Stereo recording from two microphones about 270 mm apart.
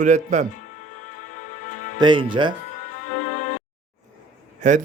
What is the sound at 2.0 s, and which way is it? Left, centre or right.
Speech, centre.